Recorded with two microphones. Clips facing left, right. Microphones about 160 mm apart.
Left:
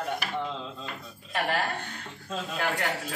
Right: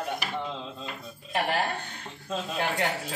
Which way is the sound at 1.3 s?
30° right (ahead or behind).